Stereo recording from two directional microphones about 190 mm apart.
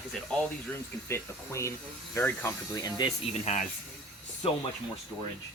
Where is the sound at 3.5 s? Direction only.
35° left (ahead or behind).